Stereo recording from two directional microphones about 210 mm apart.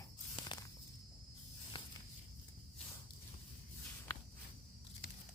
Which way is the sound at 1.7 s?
25° left (ahead or behind).